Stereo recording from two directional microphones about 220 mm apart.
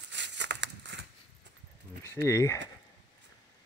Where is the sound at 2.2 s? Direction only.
15° left (ahead or behind).